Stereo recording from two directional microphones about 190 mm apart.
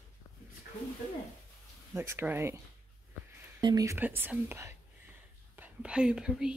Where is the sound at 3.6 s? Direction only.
20° right (ahead or behind).